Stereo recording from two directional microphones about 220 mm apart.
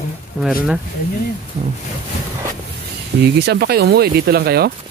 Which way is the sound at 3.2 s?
50° right (ahead or behind).